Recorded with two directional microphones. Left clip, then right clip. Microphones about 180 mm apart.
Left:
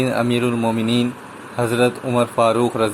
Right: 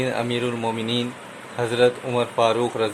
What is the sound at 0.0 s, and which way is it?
Speech, 20° left (ahead or behind).